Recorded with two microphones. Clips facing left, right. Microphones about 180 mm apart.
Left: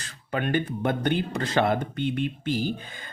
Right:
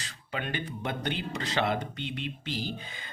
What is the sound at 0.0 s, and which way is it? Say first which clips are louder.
Speech: left 7 dB; 50° left (ahead or behind).